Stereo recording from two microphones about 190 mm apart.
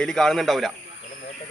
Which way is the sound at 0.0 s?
5° left (ahead or behind).